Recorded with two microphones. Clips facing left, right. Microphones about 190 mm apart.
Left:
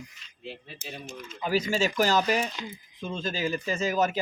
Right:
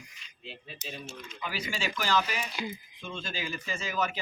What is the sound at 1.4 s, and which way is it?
Speech, 40° left (ahead or behind).